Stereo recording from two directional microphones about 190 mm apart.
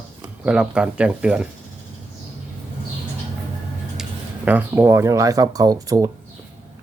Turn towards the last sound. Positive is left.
turn(degrees=-20)  # may be behind; listen again after turning